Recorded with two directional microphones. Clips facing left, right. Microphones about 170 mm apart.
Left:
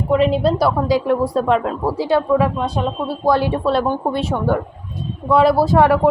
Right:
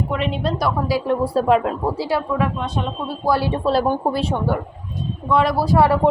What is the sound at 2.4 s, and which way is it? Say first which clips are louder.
Speech: left 3 dB; 35° left (ahead or behind).